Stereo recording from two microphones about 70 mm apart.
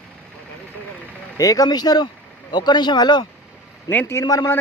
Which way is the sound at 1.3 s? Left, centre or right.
Left.